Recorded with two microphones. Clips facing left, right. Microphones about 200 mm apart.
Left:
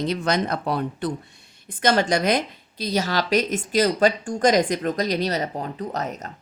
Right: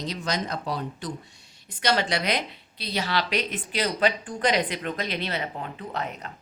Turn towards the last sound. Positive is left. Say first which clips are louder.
# left 4 dB
turn(degrees=40)  # may be behind; listen again after turning